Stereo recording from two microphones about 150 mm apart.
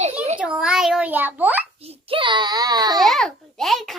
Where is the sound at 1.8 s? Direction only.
35° right (ahead or behind).